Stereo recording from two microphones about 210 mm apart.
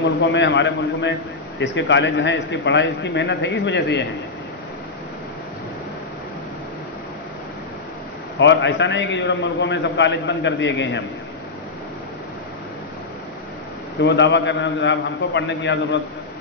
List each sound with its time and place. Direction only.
0.0 s a man's voice: 60° left (ahead or behind)
8.4 s a man's voice: 60° left (ahead or behind)
14.0 s a man's voice: 60° left (ahead or behind)